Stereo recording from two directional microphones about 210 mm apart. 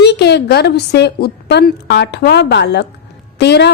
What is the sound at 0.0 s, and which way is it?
A woman's voice, 55° left (ahead or behind).